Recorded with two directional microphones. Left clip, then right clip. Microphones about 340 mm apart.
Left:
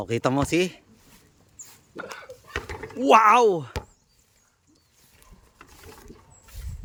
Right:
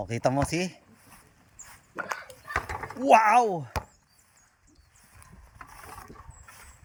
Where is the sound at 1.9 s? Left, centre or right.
Centre.